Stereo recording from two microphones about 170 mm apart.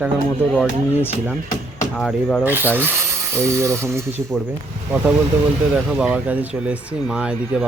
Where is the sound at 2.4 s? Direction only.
10° right (ahead or behind).